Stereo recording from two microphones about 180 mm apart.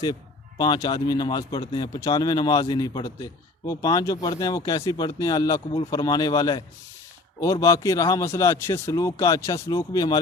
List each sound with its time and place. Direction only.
0.6 s a man's voice: 25° left (ahead or behind)